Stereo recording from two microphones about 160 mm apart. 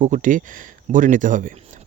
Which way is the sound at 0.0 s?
55° right (ahead or behind).